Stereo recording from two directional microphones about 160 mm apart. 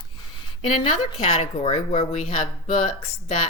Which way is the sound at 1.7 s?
50° left (ahead or behind).